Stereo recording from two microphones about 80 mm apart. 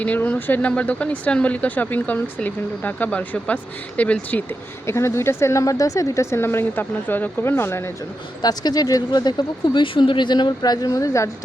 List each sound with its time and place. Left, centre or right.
0.0 s speech: centre
4.9 s a woman's voice: left
8.4 s speech: left
9.7 s speech: left